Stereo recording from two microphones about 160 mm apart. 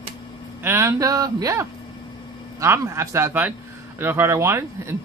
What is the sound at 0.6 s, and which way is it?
Speech, 15° right (ahead or behind).